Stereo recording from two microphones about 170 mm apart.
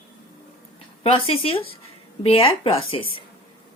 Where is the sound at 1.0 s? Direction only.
35° left (ahead or behind).